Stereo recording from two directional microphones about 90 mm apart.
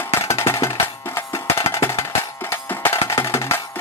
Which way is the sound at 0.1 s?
30° left (ahead or behind).